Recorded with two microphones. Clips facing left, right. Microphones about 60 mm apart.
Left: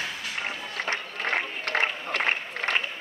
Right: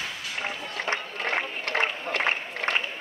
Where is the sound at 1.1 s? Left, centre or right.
Right.